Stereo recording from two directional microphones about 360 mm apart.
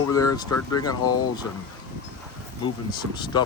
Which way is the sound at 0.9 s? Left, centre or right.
Left.